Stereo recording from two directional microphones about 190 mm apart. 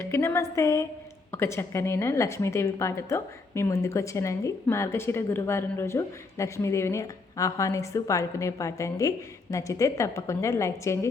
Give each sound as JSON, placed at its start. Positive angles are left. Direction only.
{"t": 0.0, "sound": "a woman's voice", "side_deg": 15}